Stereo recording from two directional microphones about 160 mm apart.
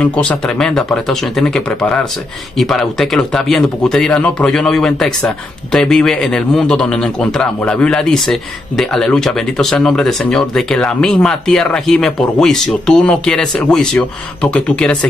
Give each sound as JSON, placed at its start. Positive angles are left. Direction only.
{"t": 0.0, "sound": "a man's voice", "side_deg": 10}